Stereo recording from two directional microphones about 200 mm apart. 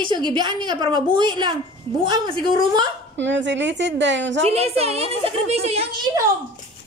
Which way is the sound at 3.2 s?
65° right (ahead or behind).